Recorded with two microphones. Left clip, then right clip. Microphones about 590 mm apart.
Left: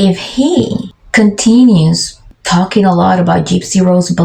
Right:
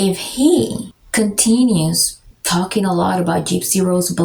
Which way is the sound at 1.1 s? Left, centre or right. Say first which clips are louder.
Left 7 dB; right.